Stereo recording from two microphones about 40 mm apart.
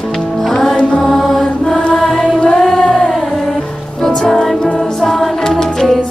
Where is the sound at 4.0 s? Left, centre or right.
Centre.